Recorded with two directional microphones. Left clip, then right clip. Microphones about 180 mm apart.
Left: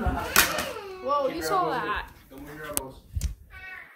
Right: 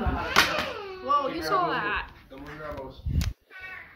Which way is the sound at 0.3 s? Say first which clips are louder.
Right 1 dB; 40° left (ahead or behind).